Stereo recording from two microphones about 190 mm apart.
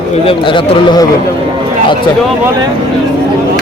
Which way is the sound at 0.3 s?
25° left (ahead or behind).